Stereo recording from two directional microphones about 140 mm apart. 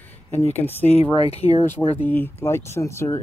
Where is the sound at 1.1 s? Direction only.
50° left (ahead or behind).